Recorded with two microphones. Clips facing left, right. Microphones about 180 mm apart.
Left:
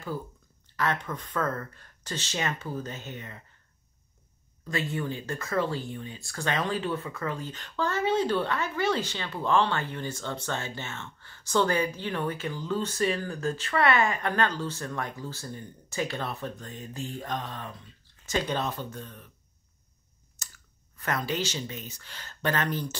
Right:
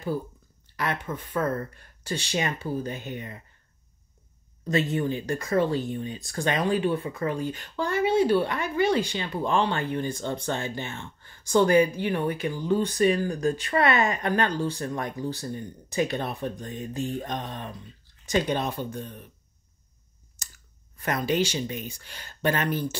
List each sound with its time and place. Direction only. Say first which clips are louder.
1.1 s speech: right 3 dB; 10° right (ahead or behind)
4.6 s speech: right 6 dB; 20° right (ahead or behind)
20.4 s scissors: even; 15° right (ahead or behind)
21.0 s speech: right 5 dB; 15° right (ahead or behind)